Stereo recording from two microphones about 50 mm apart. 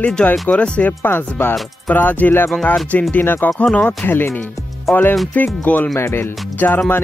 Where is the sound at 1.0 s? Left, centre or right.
Left.